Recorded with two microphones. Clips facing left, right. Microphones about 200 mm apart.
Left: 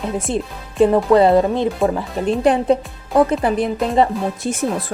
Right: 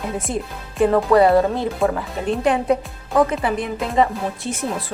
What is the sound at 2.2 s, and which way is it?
Speech, 35° left (ahead or behind).